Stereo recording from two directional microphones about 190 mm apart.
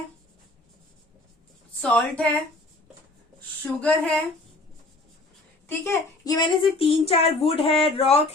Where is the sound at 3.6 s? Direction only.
5° left (ahead or behind).